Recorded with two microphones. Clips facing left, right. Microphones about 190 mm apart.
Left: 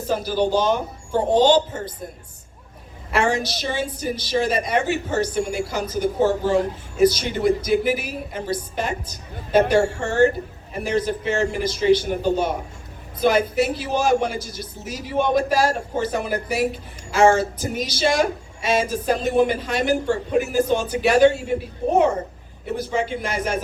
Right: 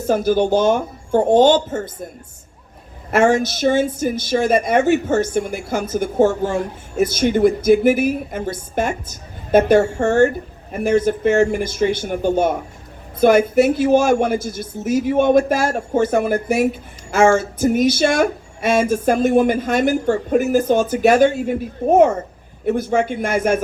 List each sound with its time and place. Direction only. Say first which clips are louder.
0.1 s a woman's voice: right 5 dB; 50° right (ahead or behind)
3.1 s a woman's voice: right 6 dB; 50° right (ahead or behind)